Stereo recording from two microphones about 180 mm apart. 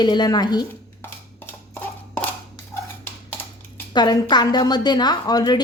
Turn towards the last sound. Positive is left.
turn(degrees=20)  # may be behind; listen again after turning